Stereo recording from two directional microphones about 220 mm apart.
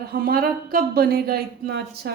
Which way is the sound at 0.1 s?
40° right (ahead or behind).